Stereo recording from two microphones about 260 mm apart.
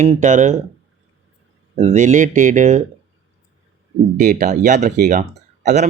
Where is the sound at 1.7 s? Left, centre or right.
Right.